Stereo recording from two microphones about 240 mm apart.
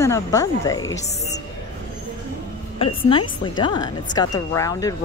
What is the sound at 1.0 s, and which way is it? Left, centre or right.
Speech, left.